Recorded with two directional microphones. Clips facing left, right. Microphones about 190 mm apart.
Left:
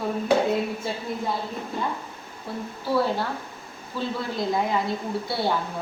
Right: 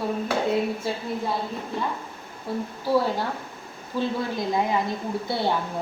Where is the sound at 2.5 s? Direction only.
15° right (ahead or behind).